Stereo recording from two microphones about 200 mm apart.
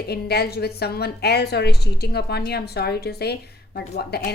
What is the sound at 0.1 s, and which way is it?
A woman's voice, 55° left (ahead or behind).